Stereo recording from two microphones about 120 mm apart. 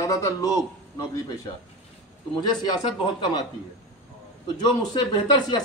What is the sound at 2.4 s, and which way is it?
Speech, 35° left (ahead or behind).